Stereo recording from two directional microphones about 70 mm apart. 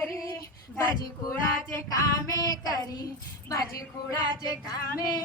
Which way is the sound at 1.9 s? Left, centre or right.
Left.